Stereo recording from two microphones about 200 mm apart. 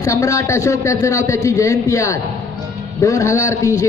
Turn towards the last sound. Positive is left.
turn(degrees=15)  # may be behind; listen again after turning